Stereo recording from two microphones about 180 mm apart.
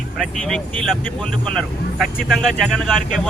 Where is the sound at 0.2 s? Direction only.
Centre (ahead or behind).